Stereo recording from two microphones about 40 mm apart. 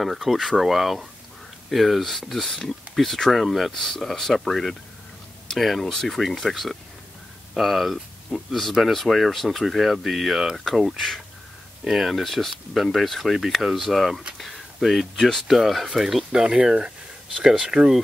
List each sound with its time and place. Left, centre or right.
0.0 s speech: centre
3.7 s speech: centre
11.8 s speech: centre
12.2 s speech: centre
13.9 s speech: centre